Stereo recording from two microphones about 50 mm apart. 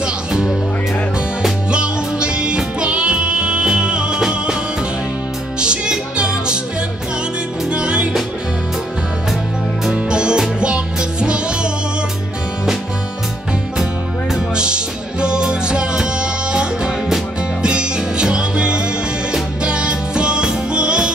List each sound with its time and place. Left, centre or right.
0.0 s music: centre
1.7 s music: centre
5.6 s music: centre
7.7 s music: right
10.0 s music: centre
14.5 s music: centre